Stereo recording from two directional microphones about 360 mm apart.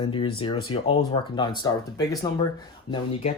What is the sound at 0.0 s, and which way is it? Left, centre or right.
Speech, centre.